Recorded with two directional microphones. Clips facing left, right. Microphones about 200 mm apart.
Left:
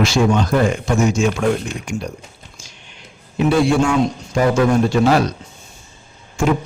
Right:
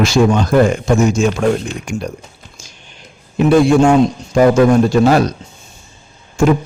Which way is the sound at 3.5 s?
45° right (ahead or behind).